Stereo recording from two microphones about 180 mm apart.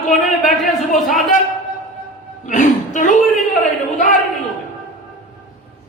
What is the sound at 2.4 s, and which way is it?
Speech, 45° left (ahead or behind).